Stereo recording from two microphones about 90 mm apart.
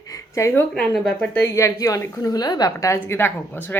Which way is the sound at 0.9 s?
5° left (ahead or behind).